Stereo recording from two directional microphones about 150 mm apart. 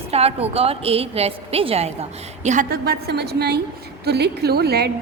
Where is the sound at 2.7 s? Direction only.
90° right.